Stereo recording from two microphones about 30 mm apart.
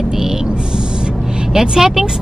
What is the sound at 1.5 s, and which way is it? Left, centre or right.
Speech, centre.